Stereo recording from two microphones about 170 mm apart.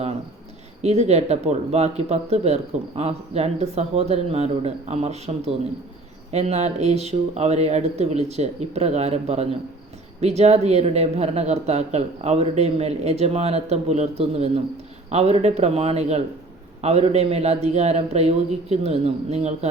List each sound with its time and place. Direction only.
0.8 s speech: 40° right (ahead or behind)